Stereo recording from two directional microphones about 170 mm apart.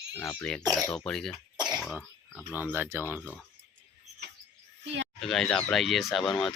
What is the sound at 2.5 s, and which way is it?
Speech, 10° right (ahead or behind).